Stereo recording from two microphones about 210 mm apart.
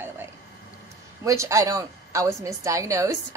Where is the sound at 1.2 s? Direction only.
15° right (ahead or behind).